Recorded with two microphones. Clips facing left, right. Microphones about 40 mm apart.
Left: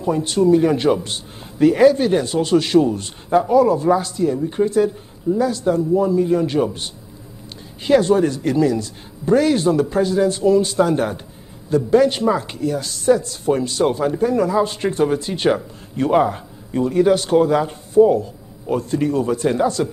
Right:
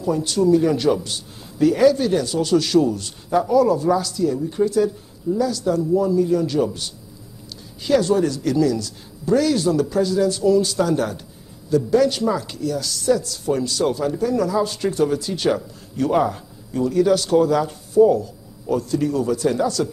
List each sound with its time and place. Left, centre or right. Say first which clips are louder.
0.0 s speech: left 2 dB; left